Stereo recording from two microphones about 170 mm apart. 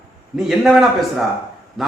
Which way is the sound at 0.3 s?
Centre (ahead or behind).